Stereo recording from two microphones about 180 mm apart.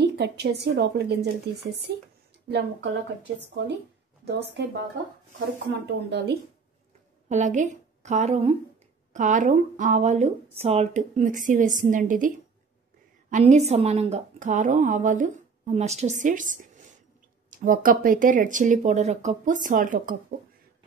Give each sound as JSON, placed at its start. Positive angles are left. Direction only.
{"t": 0.0, "sound": "a woman's voice", "side_deg": -65}
{"t": 4.2, "sound": "speech", "side_deg": -70}
{"t": 5.7, "sound": "speech", "side_deg": -70}
{"t": 7.2, "sound": "a woman's voice", "side_deg": -40}